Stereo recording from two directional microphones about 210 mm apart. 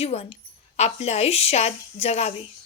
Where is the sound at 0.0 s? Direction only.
30° left (ahead or behind).